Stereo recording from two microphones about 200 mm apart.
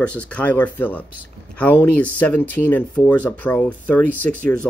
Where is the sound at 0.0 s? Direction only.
5° left (ahead or behind).